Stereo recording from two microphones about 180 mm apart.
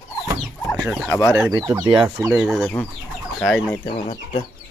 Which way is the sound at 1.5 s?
20° right (ahead or behind).